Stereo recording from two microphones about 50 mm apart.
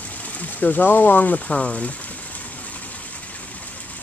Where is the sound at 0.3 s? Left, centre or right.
Left.